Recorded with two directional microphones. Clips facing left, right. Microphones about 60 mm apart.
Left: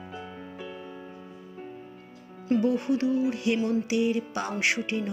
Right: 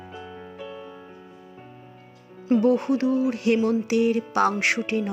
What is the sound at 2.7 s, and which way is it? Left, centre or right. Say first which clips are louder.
Music: right 3 dB; right.